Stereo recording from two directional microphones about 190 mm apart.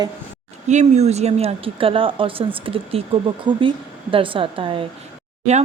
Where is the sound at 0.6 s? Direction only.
35° right (ahead or behind).